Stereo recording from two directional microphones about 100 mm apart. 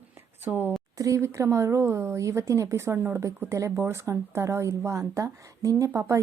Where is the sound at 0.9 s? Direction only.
35° right (ahead or behind).